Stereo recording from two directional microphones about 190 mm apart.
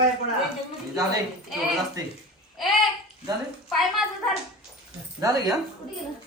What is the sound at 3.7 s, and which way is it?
Speech, centre (ahead or behind).